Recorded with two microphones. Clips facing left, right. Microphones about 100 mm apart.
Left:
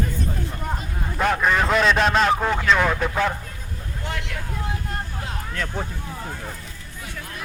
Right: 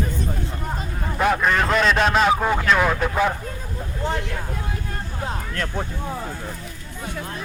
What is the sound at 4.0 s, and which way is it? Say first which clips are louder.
Speech: right 6 dB; 30° right (ahead or behind).